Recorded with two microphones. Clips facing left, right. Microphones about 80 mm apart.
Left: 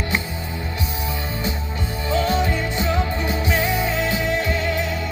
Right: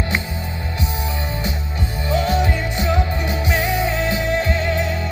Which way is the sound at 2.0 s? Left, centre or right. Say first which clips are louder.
Right 1 dB; right.